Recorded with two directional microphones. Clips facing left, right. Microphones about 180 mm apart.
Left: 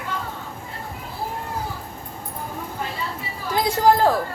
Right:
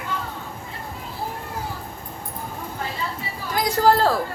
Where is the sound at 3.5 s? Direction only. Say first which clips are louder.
Left 1 dB; 20° left (ahead or behind).